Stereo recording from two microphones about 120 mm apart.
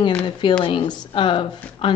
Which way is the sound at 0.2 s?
40° left (ahead or behind).